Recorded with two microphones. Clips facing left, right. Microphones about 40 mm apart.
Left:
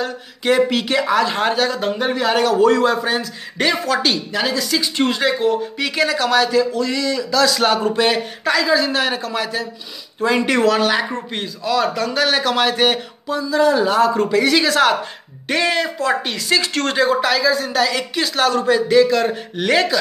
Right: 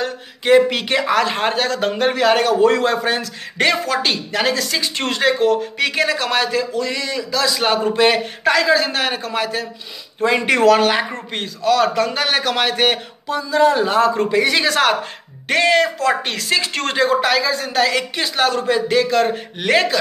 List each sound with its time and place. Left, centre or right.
0.7 s speech: right
1.7 s a man's voice: right
5.8 s speech: right
7.7 s speech: right
11.0 s speech: right
11.6 s speech: right
14.7 s speech: right